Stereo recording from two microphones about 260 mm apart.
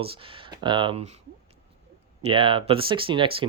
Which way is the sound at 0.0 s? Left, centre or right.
Centre.